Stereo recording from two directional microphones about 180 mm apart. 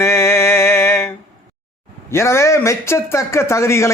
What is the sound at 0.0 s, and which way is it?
Music, 15° left (ahead or behind).